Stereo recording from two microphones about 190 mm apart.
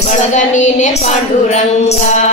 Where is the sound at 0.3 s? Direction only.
40° left (ahead or behind).